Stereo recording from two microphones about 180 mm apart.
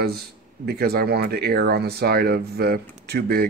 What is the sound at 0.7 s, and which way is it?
Speech, 60° right (ahead or behind).